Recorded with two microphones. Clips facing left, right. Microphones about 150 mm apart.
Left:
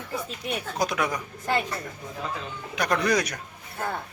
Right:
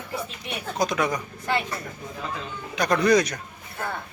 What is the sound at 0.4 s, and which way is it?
Speech, 40° left (ahead or behind).